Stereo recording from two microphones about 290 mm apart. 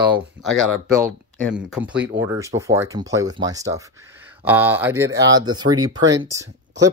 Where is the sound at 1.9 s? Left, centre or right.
Right.